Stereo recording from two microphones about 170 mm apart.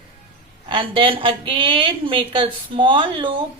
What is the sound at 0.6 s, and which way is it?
A woman's voice, 30° right (ahead or behind).